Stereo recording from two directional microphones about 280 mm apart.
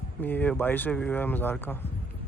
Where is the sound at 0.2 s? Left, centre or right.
Centre.